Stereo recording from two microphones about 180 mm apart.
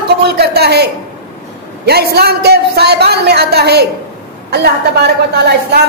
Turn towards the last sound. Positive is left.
turn(degrees=-65)  # may be behind; listen again after turning